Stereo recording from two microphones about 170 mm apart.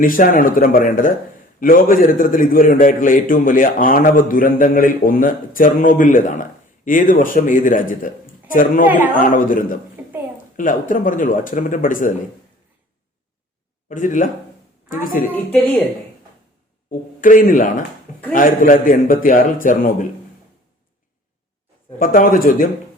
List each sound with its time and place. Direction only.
0.0 s a man's voice: 55° left (ahead or behind)
10.0 s a sound: 10° right (ahead or behind)
10.3 s a man's voice: 50° left (ahead or behind)
13.8 s speech: 50° left (ahead or behind)
16.9 s a man's voice: 50° left (ahead or behind)
21.9 s a man's voice: 55° left (ahead or behind)